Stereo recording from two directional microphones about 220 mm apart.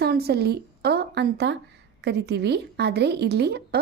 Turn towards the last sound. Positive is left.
turn(degrees=-50)  # may be behind; listen again after turning